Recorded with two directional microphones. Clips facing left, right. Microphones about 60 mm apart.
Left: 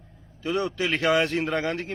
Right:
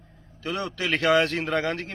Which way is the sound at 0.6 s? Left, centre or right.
Centre.